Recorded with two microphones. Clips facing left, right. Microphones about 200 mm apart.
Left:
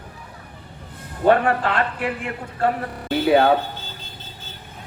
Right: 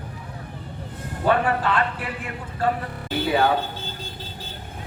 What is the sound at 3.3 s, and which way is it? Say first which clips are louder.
Speech: left 5 dB; 55° left (ahead or behind).